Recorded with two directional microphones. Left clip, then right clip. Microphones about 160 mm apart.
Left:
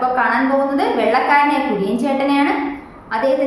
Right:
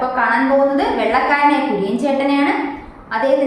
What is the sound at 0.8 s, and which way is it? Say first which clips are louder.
A woman's voice: even; 10° left (ahead or behind).